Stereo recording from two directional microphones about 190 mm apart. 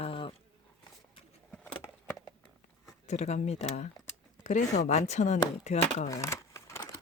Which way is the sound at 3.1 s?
35° left (ahead or behind).